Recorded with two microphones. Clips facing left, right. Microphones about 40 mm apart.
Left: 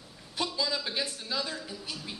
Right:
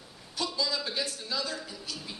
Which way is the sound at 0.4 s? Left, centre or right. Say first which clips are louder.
Even; centre.